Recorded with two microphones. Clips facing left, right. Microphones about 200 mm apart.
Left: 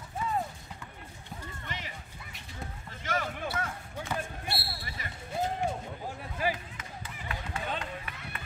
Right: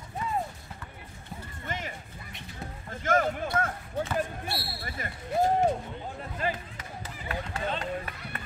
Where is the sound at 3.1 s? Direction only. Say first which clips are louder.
Right 8 dB; 50° right (ahead or behind).